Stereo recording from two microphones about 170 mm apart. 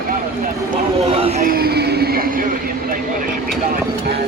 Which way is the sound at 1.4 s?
65° right (ahead or behind).